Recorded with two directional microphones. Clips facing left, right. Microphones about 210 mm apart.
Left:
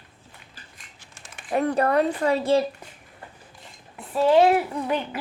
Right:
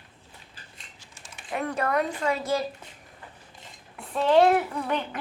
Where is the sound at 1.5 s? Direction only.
35° left (ahead or behind).